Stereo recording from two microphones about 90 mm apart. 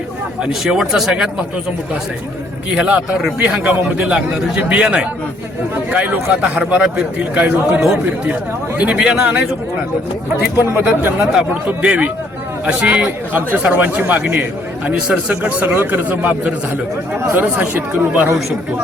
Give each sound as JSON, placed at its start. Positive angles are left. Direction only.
{"t": 0.6, "sound": "speech", "side_deg": -5}
{"t": 2.7, "sound": "a man's voice", "side_deg": -10}
{"t": 10.8, "sound": "a man's voice", "side_deg": -20}
{"t": 17.2, "sound": "speech", "side_deg": -30}
{"t": 17.4, "sound": "speech", "side_deg": -20}